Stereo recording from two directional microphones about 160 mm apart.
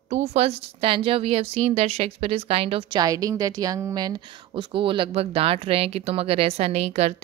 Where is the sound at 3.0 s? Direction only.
20° right (ahead or behind).